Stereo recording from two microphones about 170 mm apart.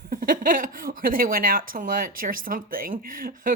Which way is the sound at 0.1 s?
55° right (ahead or behind).